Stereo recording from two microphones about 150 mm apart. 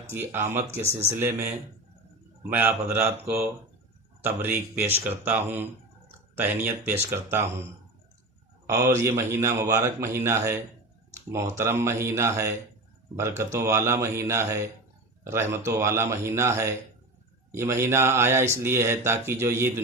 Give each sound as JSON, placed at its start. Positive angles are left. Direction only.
{"t": 0.1, "sound": "speech", "side_deg": -15}
{"t": 0.7, "sound": "speech", "side_deg": -45}
{"t": 2.4, "sound": "speech", "side_deg": -15}
{"t": 8.6, "sound": "a man's voice", "side_deg": -20}